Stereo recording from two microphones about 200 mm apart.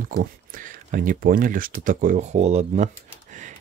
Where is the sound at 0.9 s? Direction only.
45° right (ahead or behind).